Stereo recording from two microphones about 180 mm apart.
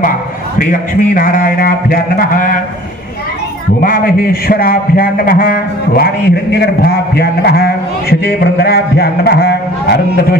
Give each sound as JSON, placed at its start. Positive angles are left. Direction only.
{"t": 0.6, "sound": "speech", "side_deg": 50}
{"t": 3.8, "sound": "a man's voice", "side_deg": 55}